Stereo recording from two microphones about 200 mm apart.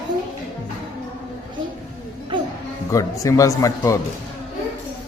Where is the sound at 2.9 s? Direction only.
15° left (ahead or behind).